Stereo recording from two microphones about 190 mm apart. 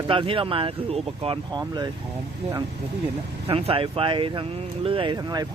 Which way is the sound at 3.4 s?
30° right (ahead or behind).